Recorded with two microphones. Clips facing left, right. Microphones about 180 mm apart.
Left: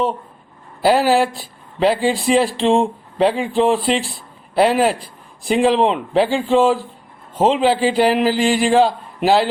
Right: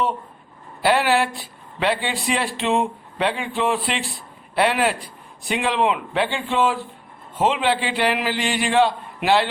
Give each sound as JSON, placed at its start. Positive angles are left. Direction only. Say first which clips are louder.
{"t": 0.8, "sound": "speech", "louder": "left 4 dB", "side_deg": 40}